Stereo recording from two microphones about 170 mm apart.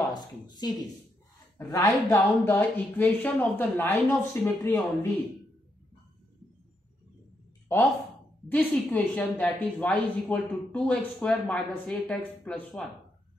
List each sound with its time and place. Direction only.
0.1 s speech: 25° left (ahead or behind)
1.9 s a woman's voice: 5° left (ahead or behind)
8.5 s a woman's voice: 10° left (ahead or behind)